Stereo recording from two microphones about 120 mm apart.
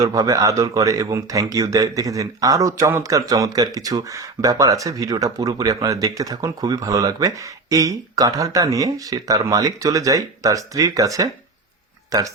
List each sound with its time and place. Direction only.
0.0 s speech: 30° right (ahead or behind)